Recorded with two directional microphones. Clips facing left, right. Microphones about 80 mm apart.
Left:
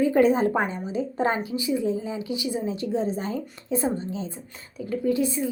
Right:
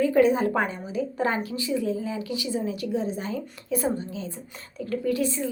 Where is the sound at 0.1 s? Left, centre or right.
Left.